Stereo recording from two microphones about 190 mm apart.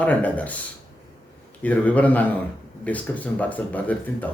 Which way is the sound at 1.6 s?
10° left (ahead or behind).